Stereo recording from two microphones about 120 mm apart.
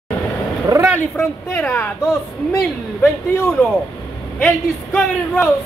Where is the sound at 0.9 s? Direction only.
20° left (ahead or behind).